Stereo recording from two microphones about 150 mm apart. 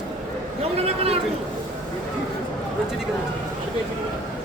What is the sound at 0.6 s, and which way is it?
Speech, 40° right (ahead or behind).